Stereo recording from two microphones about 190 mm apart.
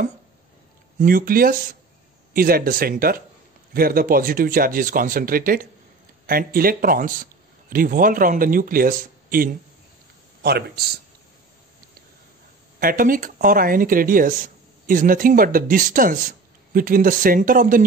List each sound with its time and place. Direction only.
0.9 s a man's voice: 50° right (ahead or behind)
12.7 s speech: 50° right (ahead or behind)